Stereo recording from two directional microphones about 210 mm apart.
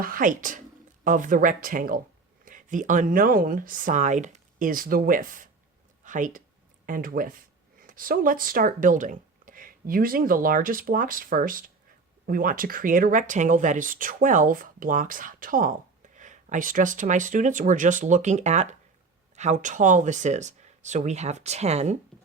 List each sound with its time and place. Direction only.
0.0 s speech: 40° right (ahead or behind)